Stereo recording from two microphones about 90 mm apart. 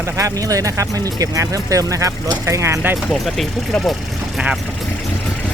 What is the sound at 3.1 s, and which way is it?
Speech, centre (ahead or behind).